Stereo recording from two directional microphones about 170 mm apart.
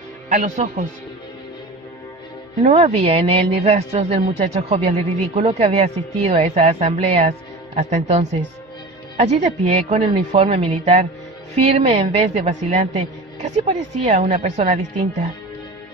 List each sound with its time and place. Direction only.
0.3 s speech: 45° right (ahead or behind)
2.6 s a woman's voice: 35° right (ahead or behind)